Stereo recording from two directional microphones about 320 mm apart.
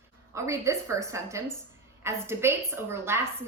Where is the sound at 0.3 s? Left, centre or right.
Centre.